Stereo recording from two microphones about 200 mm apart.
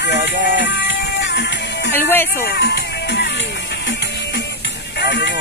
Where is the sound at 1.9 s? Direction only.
10° left (ahead or behind).